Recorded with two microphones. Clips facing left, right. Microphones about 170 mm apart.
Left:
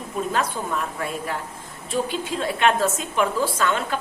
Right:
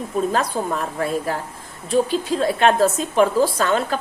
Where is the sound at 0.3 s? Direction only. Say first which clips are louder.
Right 3 dB; 35° right (ahead or behind).